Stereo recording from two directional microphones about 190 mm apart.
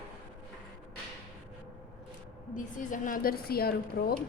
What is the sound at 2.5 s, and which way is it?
A woman's voice, 45° left (ahead or behind).